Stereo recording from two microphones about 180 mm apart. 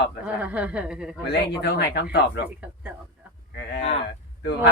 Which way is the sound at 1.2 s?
65° left (ahead or behind).